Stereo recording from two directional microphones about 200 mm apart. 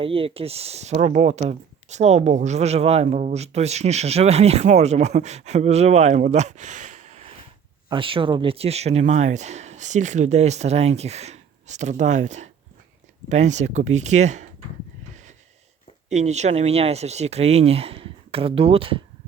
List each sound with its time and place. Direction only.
0.0 s speech: 25° right (ahead or behind)
7.9 s speech: 25° right (ahead or behind)
15.1 s gasp: 35° right (ahead or behind)
16.0 s speech: 35° right (ahead or behind)